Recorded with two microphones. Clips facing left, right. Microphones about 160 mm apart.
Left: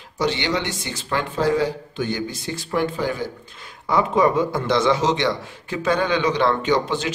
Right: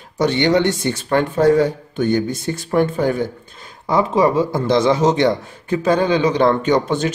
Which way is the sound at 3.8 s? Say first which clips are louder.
Right 3 dB; 35° right (ahead or behind).